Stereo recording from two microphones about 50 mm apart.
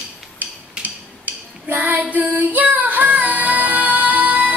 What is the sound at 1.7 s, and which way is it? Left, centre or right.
Female singing, right.